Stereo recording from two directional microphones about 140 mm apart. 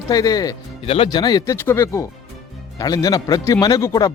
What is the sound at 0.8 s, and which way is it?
Speech, 45° left (ahead or behind).